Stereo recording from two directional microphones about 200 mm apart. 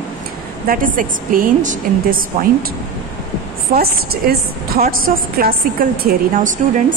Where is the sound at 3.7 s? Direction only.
50° right (ahead or behind).